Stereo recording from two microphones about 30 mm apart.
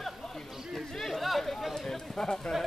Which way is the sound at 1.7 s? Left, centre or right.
Centre.